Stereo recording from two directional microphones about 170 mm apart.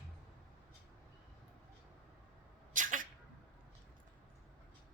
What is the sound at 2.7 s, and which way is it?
Sneeze, 50° right (ahead or behind).